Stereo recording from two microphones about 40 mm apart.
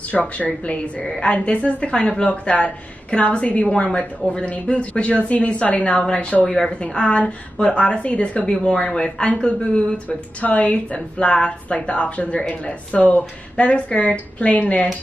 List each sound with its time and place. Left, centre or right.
0.1 s a woman's voice: left
6.4 s speech: centre
7.6 s a woman's voice: left
8.5 s a woman's voice: left
9.6 s speech: left
10.0 s a woman's voice: left